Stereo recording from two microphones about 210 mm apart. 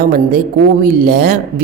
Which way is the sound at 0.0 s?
45° right (ahead or behind).